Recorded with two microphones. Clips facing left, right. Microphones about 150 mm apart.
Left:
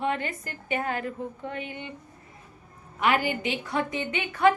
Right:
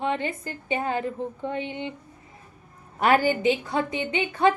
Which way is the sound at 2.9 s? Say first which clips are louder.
Right 4 dB; 40° right (ahead or behind).